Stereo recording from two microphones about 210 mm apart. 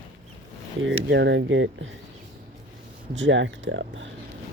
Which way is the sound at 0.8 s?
60° right (ahead or behind).